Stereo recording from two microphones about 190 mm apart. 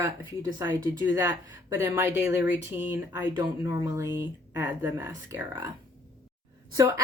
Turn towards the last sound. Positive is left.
turn(degrees=-15)  # may be behind; listen again after turning